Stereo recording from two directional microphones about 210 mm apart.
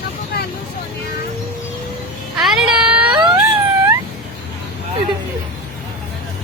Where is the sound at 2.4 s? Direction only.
Centre (ahead or behind).